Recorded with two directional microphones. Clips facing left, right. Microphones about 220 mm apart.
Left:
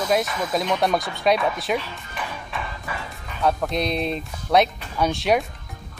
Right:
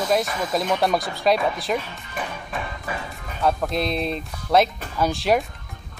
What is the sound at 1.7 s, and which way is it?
Speech, 45° right (ahead or behind).